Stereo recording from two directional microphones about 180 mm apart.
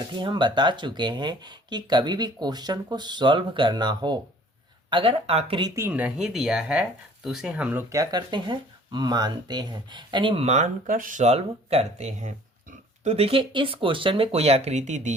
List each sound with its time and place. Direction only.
0.2 s speech: 25° right (ahead or behind)